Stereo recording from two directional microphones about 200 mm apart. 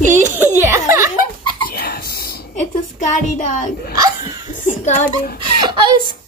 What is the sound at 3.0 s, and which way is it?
Speech, 40° left (ahead or behind).